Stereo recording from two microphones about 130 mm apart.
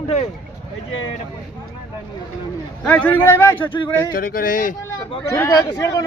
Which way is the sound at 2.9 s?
10° left (ahead or behind).